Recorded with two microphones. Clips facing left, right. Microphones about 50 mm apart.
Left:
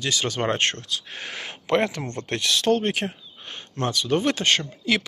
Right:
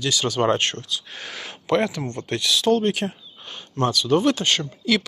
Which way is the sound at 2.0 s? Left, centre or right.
Left.